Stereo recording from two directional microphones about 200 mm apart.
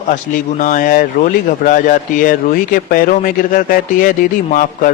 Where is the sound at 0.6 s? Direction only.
45° left (ahead or behind).